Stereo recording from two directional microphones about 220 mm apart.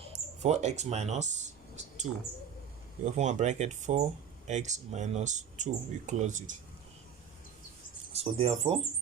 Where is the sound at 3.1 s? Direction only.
30° right (ahead or behind).